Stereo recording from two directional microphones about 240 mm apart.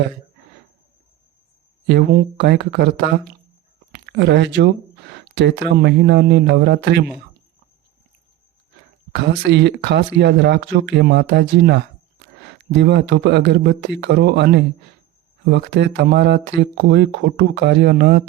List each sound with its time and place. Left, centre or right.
1.9 s speech: right
9.1 s speech: right